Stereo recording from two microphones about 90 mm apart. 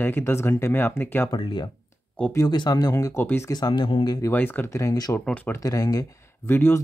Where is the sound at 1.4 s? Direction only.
65° left (ahead or behind).